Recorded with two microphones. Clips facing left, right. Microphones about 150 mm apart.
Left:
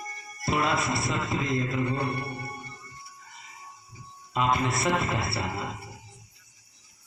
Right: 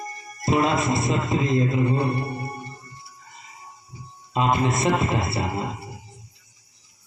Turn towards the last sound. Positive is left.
turn(degrees=-20)  # may be behind; listen again after turning